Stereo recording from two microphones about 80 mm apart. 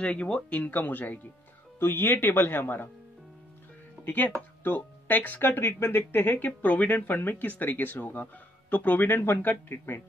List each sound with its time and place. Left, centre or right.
0.0 s speech: centre
4.0 s speech: left